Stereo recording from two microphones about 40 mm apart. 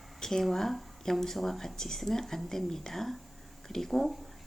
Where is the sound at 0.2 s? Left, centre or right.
Centre.